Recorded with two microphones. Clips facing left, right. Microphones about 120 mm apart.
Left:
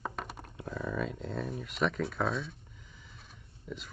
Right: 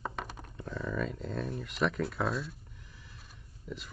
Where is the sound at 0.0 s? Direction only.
Centre (ahead or behind).